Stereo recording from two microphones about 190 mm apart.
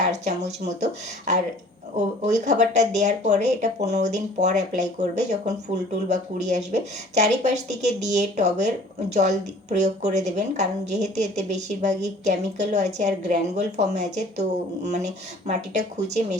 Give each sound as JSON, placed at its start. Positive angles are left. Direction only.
{"t": 0.1, "sound": "a woman's voice", "side_deg": -40}